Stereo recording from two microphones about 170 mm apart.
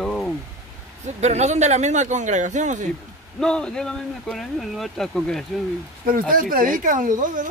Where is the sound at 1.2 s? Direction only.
40° right (ahead or behind).